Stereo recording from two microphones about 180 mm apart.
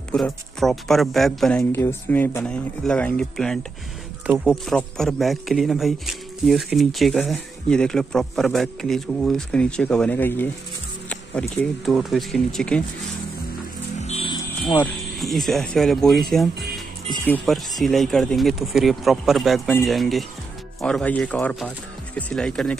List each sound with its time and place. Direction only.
0.1 s a man's voice: centre (ahead or behind)
13.9 s music: 35° left (ahead or behind)
14.8 s a man's voice: centre (ahead or behind)